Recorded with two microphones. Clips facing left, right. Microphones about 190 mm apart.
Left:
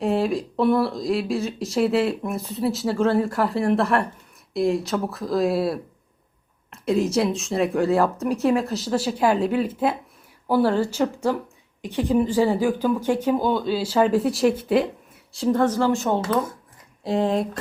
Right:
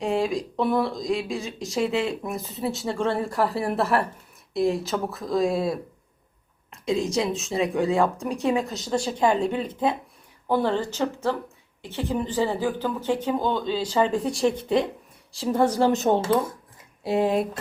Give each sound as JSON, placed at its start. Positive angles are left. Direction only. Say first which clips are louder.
{"t": 0.0, "sound": "speech", "louder": "left 2 dB", "side_deg": 0}
{"t": 6.8, "sound": "speech", "louder": "left 3 dB", "side_deg": 5}
{"t": 15.5, "sound": "speech", "louder": "right 1 dB", "side_deg": -10}
{"t": 17.0, "sound": "speech", "louder": "even", "side_deg": -10}